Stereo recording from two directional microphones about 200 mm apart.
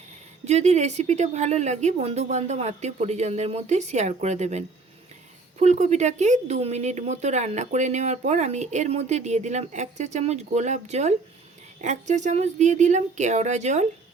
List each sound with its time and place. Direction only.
0.4 s speech: 35° right (ahead or behind)